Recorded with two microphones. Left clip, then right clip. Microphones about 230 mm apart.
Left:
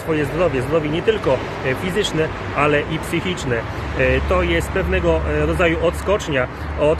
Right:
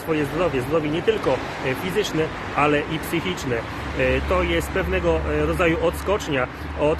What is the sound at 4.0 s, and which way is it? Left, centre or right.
Speech, centre.